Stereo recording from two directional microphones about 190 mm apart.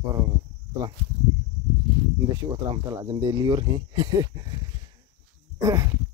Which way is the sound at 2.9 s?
20° right (ahead or behind).